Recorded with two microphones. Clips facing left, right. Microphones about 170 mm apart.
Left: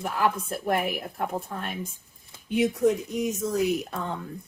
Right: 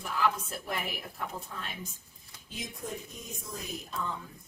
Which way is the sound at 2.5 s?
70° left (ahead or behind).